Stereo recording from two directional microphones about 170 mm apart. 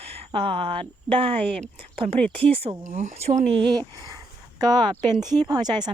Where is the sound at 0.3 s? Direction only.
30° right (ahead or behind).